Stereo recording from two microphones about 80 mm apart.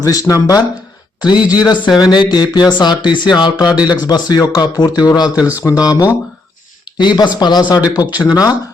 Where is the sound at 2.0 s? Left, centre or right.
Left.